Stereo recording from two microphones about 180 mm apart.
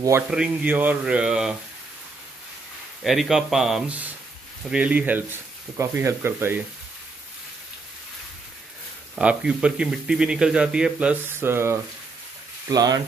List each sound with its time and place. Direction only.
0.3 s speech: 5° right (ahead or behind)
3.0 s speech: centre (ahead or behind)
9.1 s speech: 5° right (ahead or behind)